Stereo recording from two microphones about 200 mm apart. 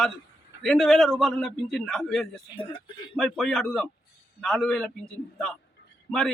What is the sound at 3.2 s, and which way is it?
Speech, centre (ahead or behind).